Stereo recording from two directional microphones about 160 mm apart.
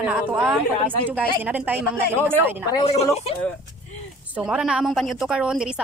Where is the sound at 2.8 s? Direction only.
40° left (ahead or behind).